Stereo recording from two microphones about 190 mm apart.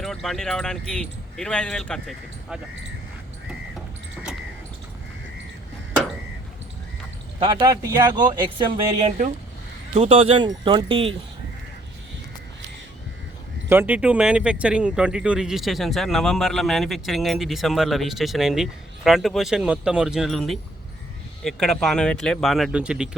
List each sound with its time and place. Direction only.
0.0 s speech: centre (ahead or behind)
7.3 s speech: 25° right (ahead or behind)
9.0 s speech: 45° right (ahead or behind)
9.9 s speech: 30° right (ahead or behind)
13.7 s speech: 10° right (ahead or behind)